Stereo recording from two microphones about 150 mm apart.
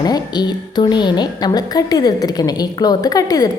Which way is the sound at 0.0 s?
25° left (ahead or behind).